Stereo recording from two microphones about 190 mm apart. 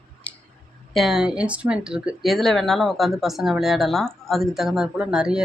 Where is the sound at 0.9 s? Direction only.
Centre (ahead or behind).